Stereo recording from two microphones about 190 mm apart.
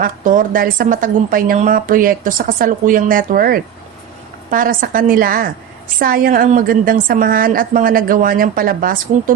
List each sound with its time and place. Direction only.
0.0 s a woman's voice: 45° right (ahead or behind)